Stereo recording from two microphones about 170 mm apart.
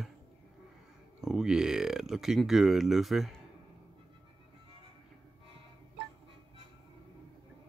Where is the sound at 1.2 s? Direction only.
5° right (ahead or behind).